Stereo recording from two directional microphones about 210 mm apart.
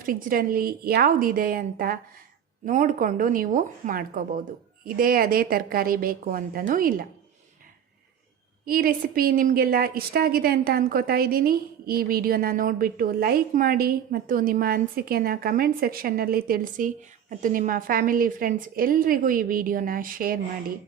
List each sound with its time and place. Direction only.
0.0 s a woman's voice: 40° right (ahead or behind)
8.6 s a woman's voice: 45° right (ahead or behind)